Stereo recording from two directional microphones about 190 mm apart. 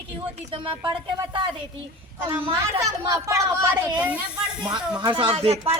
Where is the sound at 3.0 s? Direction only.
20° right (ahead or behind).